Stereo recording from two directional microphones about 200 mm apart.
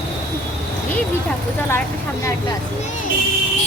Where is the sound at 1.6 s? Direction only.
10° left (ahead or behind).